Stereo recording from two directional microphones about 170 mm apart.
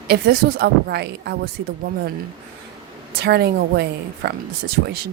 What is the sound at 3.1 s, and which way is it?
A woman's voice, 70° right (ahead or behind).